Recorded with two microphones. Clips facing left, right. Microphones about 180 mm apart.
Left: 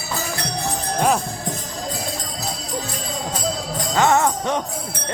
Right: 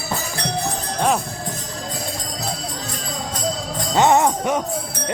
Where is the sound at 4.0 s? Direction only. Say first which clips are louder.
Right 2 dB; 20° right (ahead or behind).